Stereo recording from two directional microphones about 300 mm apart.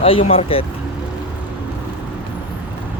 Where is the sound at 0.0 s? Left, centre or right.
Centre.